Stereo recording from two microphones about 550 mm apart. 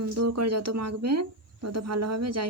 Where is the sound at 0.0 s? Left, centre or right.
Right.